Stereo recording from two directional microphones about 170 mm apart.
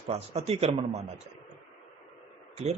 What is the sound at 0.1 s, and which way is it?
Speech, 35° right (ahead or behind).